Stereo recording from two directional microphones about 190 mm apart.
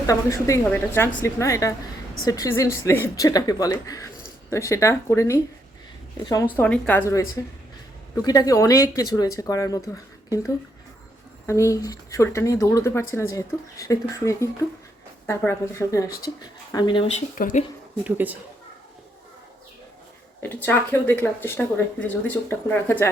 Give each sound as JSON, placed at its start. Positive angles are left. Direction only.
{"t": 0.1, "sound": "speech", "side_deg": 15}
{"t": 6.6, "sound": "speech", "side_deg": 10}
{"t": 17.2, "sound": "speech", "side_deg": 45}
{"t": 18.0, "sound": "a woman's voice", "side_deg": -10}
{"t": 20.4, "sound": "speech", "side_deg": 10}